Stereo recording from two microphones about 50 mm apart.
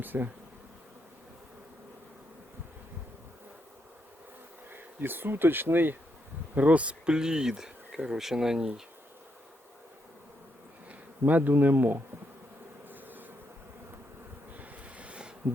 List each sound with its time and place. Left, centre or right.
0.0 s bee: right
4.7 s bee: right
6.5 s speech: right; by 8.7 s centre
10.8 s bee: right
14.5 s a sound: right